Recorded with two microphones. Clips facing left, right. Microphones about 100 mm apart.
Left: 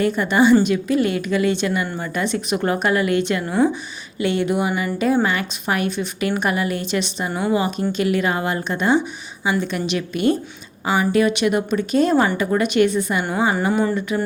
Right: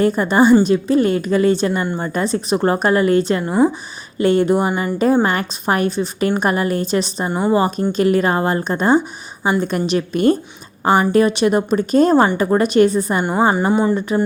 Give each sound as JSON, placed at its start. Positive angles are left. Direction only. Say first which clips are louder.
{"t": 0.0, "sound": "a woman's voice", "louder": "right 3 dB", "side_deg": -40}
{"t": 4.2, "sound": "a woman's voice", "louder": "right 5 dB", "side_deg": -40}